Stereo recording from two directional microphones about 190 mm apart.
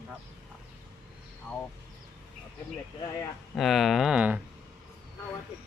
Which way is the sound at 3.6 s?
Centre (ahead or behind).